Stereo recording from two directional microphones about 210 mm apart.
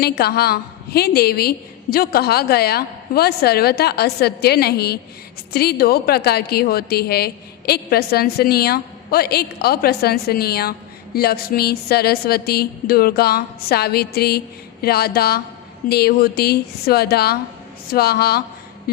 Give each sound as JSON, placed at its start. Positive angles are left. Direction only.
{"t": 0.0, "sound": "a woman's voice", "side_deg": 50}